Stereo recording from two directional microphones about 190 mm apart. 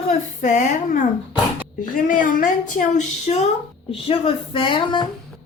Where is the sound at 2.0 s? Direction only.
45° left (ahead or behind).